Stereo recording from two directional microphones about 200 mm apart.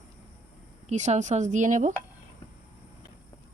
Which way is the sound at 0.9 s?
35° right (ahead or behind).